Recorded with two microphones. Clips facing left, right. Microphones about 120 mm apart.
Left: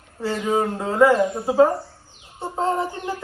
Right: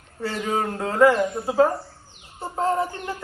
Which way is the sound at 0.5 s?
5° left (ahead or behind).